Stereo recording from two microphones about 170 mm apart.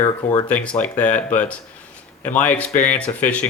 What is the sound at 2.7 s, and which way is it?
Speech, 45° left (ahead or behind).